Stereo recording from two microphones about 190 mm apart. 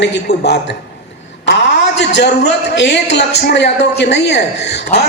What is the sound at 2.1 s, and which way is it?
A man's voice, 65° left (ahead or behind).